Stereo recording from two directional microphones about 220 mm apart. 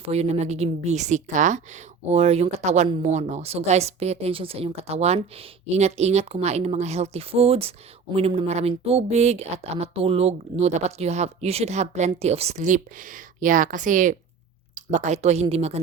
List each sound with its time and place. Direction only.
0.0 s a woman's voice: 30° right (ahead or behind)